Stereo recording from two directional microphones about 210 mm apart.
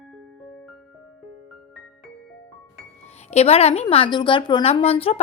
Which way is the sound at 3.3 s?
30° left (ahead or behind).